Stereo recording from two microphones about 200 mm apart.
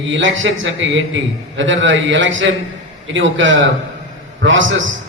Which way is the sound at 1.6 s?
70° right (ahead or behind).